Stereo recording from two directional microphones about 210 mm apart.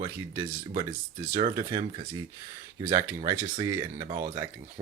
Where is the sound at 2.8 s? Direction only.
15° right (ahead or behind).